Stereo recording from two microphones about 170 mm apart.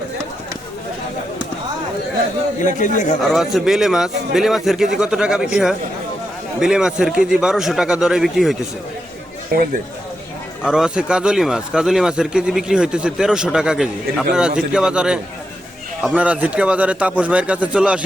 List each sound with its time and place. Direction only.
2.7 s speech: 45° left (ahead or behind)
3.2 s speech: centre (ahead or behind)
10.6 s speech: 5° right (ahead or behind)